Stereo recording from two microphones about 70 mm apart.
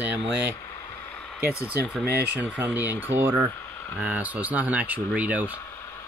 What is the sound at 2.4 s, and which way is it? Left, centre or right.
Speech, right.